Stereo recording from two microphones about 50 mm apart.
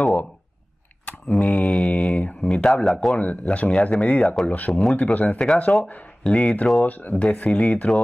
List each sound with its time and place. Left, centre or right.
1.3 s speech: left
1.9 s a sound: left
2.4 s speech: centre
3.2 s speech: left
6.8 s speech: left